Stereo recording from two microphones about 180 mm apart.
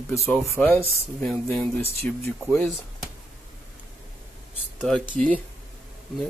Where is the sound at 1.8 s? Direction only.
35° right (ahead or behind).